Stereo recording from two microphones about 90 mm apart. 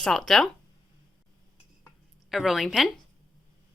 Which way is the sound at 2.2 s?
5° right (ahead or behind).